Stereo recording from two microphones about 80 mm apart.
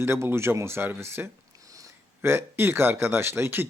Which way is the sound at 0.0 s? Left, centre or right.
Right.